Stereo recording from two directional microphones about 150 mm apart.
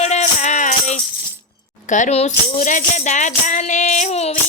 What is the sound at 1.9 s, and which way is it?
Speech, 55° left (ahead or behind).